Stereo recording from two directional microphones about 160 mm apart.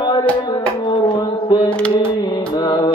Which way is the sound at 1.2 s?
30° left (ahead or behind).